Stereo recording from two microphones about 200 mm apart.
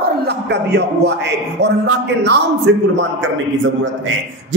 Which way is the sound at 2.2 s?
60° right (ahead or behind).